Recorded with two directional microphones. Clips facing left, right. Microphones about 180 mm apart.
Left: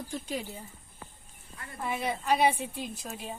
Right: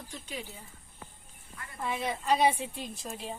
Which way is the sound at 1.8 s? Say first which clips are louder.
Left 1 dB; 5° left (ahead or behind).